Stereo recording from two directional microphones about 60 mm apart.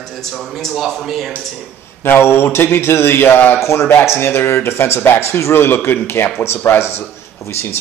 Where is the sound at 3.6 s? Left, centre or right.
Left.